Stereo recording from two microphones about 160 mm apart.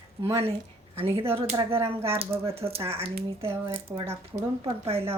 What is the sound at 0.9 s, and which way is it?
Speech, 35° right (ahead or behind).